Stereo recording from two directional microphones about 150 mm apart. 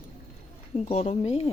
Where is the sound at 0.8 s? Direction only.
45° left (ahead or behind).